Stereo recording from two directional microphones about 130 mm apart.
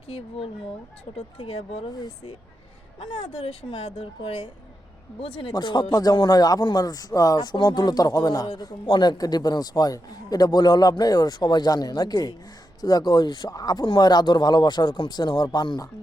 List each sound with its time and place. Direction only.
0.1 s a woman's voice: 50° left (ahead or behind)
3.0 s a woman's voice: 45° left (ahead or behind)